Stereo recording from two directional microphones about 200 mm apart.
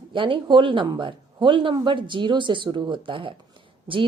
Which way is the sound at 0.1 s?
25° right (ahead or behind).